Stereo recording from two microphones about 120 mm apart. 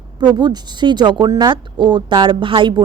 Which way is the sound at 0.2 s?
35° right (ahead or behind).